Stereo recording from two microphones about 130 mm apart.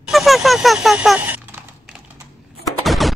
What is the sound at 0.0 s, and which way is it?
Typing, centre (ahead or behind).